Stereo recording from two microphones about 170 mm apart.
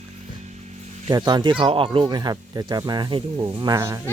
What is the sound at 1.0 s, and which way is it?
Speech, 25° right (ahead or behind).